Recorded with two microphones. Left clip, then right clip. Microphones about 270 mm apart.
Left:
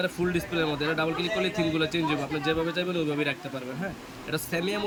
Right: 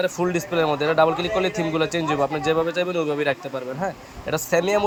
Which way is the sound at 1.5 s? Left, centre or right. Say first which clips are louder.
Right 4 dB; centre.